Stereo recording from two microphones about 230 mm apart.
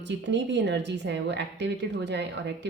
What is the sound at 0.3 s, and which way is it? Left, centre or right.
A woman's voice, right.